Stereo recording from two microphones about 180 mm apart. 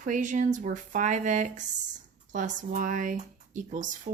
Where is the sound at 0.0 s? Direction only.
45° right (ahead or behind).